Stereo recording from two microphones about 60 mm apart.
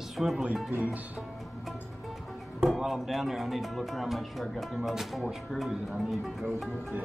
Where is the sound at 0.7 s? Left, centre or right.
Right.